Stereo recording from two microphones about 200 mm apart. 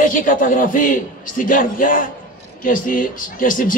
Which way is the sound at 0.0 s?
40° left (ahead or behind).